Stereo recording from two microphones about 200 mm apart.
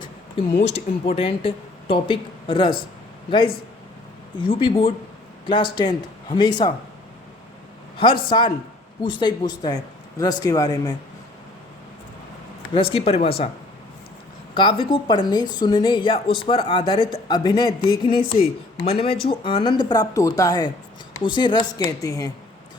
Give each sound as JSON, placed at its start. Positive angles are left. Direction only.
{"t": 0.6, "sound": "speech", "side_deg": 30}
{"t": 4.4, "sound": "speech", "side_deg": 25}
{"t": 7.9, "sound": "speech", "side_deg": 25}
{"t": 12.7, "sound": "speech", "side_deg": 25}
{"t": 14.5, "sound": "speech", "side_deg": 25}